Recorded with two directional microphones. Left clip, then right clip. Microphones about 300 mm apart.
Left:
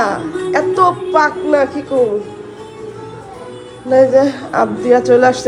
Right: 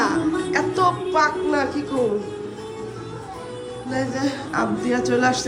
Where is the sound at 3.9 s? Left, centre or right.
Centre.